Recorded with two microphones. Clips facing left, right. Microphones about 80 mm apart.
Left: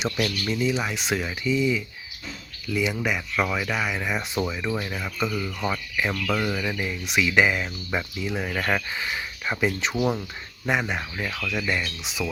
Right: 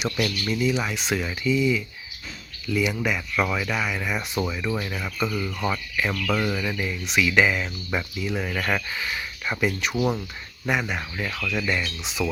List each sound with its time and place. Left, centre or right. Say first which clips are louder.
0.4 s speech: right 2 dB; centre
3.4 s speech: right 1 dB; centre
3.7 s speech: even; centre
6.8 s speech: right 2 dB; centre
10.0 s speech: even; centre